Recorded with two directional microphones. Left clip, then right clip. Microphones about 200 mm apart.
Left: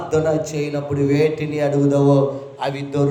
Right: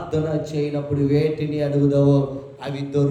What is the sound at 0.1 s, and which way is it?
A man's voice, 10° right (ahead or behind).